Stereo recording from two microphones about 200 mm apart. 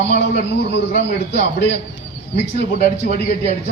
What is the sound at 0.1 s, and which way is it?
Speech, 55° left (ahead or behind).